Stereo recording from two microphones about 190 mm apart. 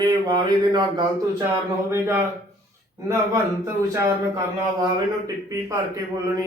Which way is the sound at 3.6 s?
20° right (ahead or behind).